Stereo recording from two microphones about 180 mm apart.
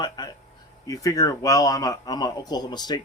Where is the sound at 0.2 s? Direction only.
25° left (ahead or behind).